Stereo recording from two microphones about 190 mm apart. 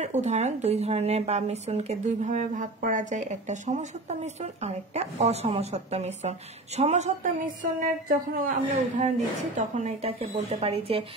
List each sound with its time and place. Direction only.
0.0 s speech: 40° right (ahead or behind)